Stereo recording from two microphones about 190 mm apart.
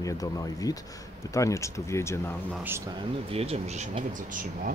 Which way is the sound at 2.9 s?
25° right (ahead or behind).